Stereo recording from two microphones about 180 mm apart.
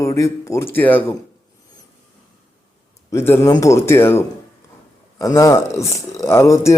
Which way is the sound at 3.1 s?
15° left (ahead or behind).